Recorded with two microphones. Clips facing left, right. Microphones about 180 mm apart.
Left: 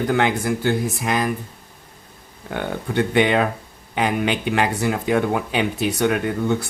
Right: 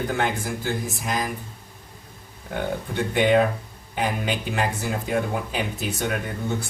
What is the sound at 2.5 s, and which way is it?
Speech, 75° left (ahead or behind).